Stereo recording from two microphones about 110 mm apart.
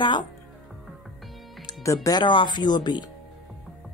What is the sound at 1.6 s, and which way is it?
Music, 30° left (ahead or behind).